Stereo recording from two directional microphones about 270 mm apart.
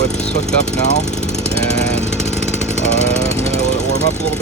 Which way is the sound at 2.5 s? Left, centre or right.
Left.